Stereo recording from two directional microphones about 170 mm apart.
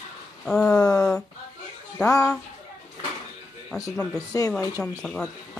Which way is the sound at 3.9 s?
5° left (ahead or behind).